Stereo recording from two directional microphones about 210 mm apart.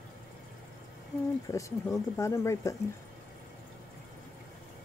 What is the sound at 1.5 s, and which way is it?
Speech, 15° left (ahead or behind).